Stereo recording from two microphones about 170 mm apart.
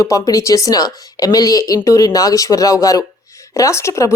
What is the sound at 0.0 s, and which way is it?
A woman's voice, 20° left (ahead or behind).